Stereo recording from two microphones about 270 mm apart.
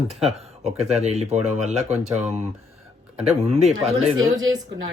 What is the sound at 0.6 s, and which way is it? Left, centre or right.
Speech, right.